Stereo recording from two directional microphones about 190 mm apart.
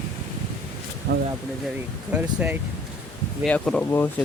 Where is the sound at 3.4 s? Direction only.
5° left (ahead or behind).